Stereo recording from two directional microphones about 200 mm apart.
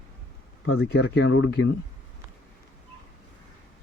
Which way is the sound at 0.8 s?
55° left (ahead or behind).